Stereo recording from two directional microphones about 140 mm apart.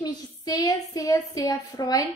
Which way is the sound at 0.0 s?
30° left (ahead or behind).